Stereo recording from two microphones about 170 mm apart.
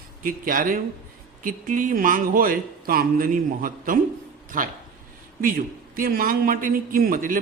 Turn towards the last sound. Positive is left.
turn(degrees=-55)  # may be behind; listen again after turning